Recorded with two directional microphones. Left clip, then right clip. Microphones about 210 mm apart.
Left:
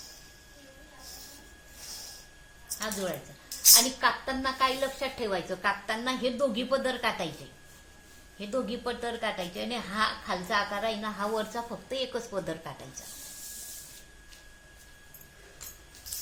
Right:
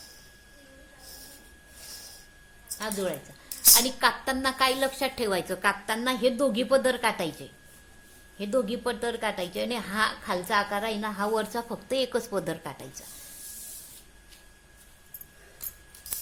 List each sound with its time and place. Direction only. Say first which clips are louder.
3.8 s speech: right 1 dB; 50° right (ahead or behind)
8.4 s speech: right 5 dB; 45° right (ahead or behind)